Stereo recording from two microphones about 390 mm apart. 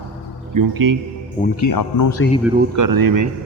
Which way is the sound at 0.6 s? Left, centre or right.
Right.